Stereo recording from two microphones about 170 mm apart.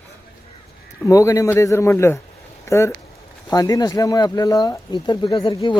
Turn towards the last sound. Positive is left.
turn(degrees=30)  # may be behind; listen again after turning